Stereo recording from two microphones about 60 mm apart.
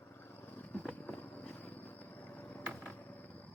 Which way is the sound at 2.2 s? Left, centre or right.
Left.